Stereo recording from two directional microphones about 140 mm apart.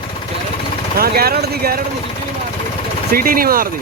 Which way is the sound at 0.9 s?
90° right.